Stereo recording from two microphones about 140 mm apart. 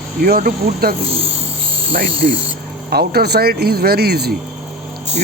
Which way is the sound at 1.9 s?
90° right.